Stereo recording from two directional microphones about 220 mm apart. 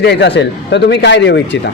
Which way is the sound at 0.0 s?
50° left (ahead or behind).